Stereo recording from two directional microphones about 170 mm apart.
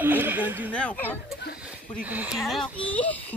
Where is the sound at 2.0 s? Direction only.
10° right (ahead or behind).